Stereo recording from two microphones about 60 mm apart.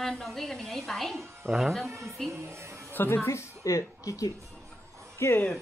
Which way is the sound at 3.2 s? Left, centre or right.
Left.